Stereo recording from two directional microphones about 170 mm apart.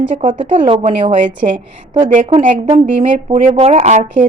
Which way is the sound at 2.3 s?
40° right (ahead or behind).